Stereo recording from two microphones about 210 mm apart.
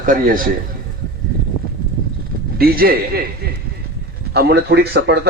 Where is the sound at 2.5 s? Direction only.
45° right (ahead or behind).